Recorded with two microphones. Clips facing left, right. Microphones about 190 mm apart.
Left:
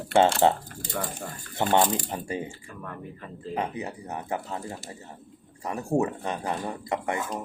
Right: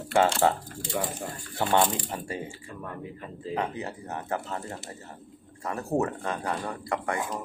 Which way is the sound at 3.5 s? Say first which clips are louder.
Even; 20° left (ahead or behind).